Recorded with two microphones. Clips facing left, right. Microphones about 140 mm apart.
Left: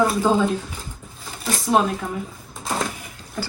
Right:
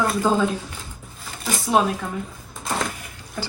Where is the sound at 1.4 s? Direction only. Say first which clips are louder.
Left 1 dB; centre (ahead or behind).